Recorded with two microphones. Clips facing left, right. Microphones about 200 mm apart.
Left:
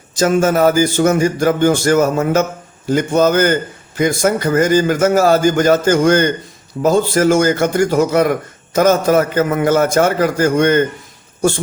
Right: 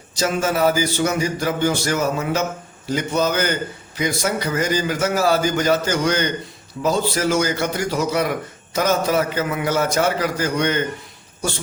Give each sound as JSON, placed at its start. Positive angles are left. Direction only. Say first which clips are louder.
{"t": 0.2, "sound": "a man's voice", "louder": "left 7 dB", "side_deg": 50}